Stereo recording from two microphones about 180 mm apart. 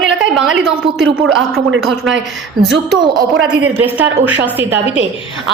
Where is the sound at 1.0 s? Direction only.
90° right.